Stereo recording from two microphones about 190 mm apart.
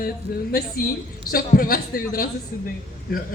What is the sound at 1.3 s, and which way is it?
A woman's voice, 50° left (ahead or behind).